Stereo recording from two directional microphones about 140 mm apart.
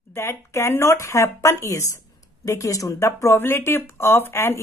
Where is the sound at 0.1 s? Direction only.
20° left (ahead or behind).